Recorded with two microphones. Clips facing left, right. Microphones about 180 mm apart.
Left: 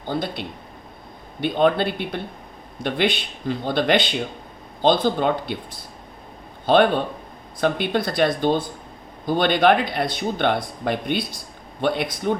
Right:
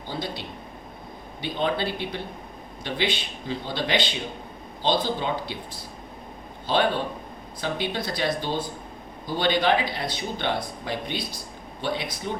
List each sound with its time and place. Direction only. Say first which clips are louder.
0.1 s speech: left 6 dB; 55° left (ahead or behind)
6.7 s speech: left 7 dB; 55° left (ahead or behind)